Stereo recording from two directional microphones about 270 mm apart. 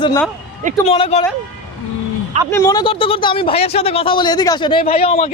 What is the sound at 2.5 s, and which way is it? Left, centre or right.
Speech, centre.